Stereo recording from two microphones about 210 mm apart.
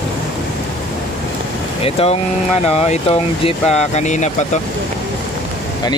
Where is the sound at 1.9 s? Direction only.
30° left (ahead or behind).